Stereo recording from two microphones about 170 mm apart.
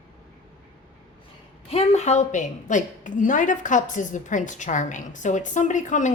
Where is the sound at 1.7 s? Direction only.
40° left (ahead or behind).